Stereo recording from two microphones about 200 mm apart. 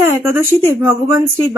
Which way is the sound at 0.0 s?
10° right (ahead or behind).